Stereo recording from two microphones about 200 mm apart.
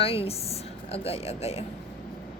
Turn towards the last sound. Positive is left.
turn(degrees=30)  # may be behind; listen again after turning